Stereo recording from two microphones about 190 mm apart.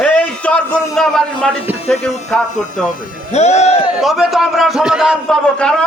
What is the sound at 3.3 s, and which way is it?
Speech, 35° left (ahead or behind).